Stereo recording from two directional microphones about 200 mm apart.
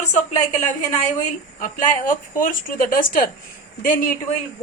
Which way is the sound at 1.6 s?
40° left (ahead or behind).